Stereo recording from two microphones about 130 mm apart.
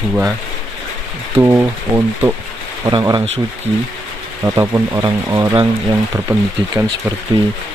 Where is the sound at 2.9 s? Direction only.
35° right (ahead or behind).